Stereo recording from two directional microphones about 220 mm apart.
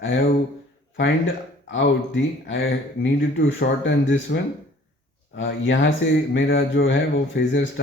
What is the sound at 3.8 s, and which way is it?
Speech, 60° left (ahead or behind).